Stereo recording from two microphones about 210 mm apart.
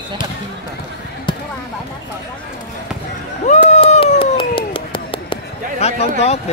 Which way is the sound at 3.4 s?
35° left (ahead or behind).